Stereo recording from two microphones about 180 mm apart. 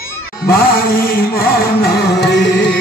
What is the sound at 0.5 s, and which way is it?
Music, 55° left (ahead or behind).